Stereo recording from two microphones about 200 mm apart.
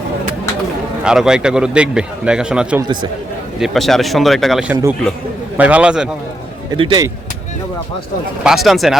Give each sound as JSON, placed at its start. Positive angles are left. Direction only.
{"t": 1.0, "sound": "a man's voice", "side_deg": -5}
{"t": 6.7, "sound": "speech", "side_deg": -25}
{"t": 8.4, "sound": "a man's voice", "side_deg": 0}